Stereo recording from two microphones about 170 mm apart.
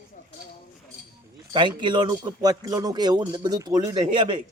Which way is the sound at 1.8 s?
25° right (ahead or behind).